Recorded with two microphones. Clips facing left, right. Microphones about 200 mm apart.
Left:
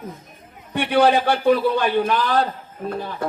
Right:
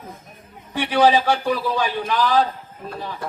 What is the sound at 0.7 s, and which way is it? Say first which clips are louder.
A man's voice: even; 60° left (ahead or behind).